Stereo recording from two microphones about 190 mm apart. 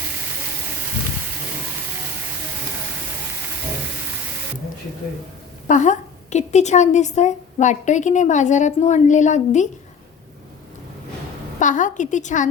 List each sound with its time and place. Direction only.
5.6 s a woman's voice: 40° left (ahead or behind)
11.6 s a woman's voice: 40° left (ahead or behind)